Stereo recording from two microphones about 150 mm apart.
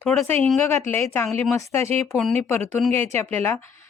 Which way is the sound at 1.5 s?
20° left (ahead or behind).